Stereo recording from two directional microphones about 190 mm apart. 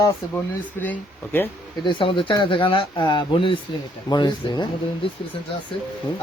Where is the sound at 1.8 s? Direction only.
25° left (ahead or behind).